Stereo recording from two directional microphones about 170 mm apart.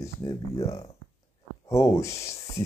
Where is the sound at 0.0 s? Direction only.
20° left (ahead or behind).